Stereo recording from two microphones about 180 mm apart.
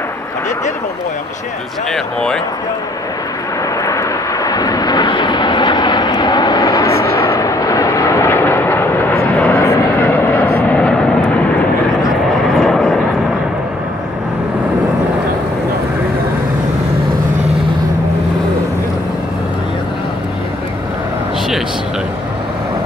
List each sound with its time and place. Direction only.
1.9 s speech: 5° left (ahead or behind)
3.8 s vehicle: 15° left (ahead or behind); by 13.0 s centre (ahead or behind)